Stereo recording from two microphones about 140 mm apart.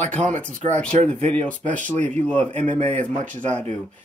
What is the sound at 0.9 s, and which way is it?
Speech, 60° right (ahead or behind).